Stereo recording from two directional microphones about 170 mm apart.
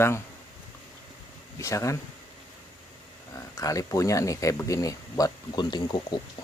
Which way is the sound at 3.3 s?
20° left (ahead or behind).